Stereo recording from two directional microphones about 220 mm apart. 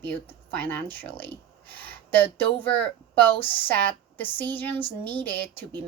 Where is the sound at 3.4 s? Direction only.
10° left (ahead or behind).